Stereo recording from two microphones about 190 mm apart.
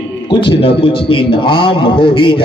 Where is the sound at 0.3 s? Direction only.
25° left (ahead or behind).